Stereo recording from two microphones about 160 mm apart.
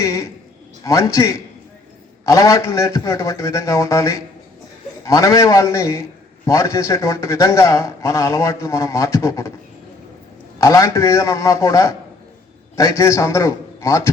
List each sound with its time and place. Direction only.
0.0 s a sound: 15° left (ahead or behind)
0.9 s a man's voice: 20° left (ahead or behind)
10.6 s a man's voice: 20° left (ahead or behind)